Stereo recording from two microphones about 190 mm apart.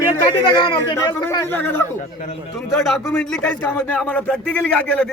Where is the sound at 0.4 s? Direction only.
25° left (ahead or behind).